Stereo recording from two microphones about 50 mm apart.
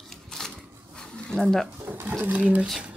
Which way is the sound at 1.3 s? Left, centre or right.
Centre.